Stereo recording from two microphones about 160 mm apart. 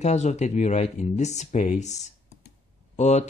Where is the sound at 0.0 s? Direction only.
45° left (ahead or behind).